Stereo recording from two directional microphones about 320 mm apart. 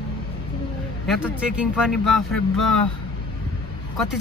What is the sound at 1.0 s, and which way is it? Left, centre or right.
Speech, centre.